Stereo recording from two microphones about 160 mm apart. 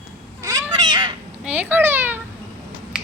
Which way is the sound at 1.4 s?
10° right (ahead or behind).